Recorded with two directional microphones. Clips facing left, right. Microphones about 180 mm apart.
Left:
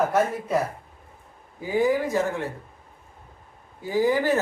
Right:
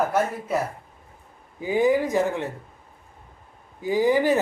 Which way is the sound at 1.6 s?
20° right (ahead or behind).